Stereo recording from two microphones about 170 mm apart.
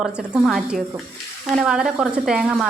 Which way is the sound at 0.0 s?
5° right (ahead or behind).